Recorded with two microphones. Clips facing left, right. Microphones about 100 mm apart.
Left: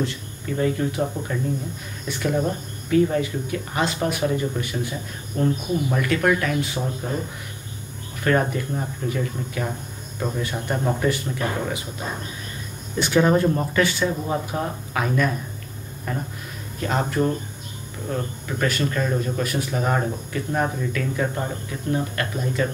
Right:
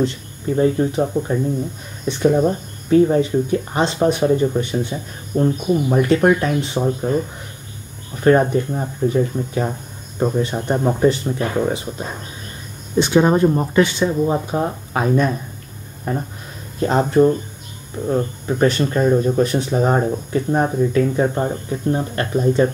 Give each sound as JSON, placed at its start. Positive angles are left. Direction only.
{"t": 0.0, "sound": "speech", "side_deg": -30}
{"t": 8.2, "sound": "speech", "side_deg": -30}
{"t": 12.9, "sound": "speech", "side_deg": -25}